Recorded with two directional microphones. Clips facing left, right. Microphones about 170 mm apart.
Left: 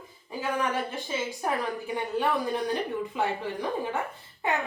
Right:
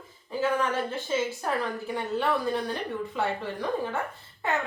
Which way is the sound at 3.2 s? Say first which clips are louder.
Even; 15° left (ahead or behind).